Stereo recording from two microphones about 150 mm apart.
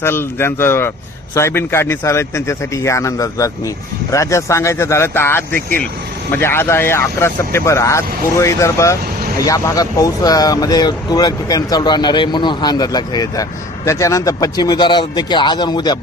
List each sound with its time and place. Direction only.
0.0 s speech: 15° left (ahead or behind)